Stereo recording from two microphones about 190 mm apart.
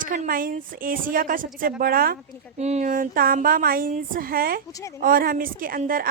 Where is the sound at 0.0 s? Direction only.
45° right (ahead or behind).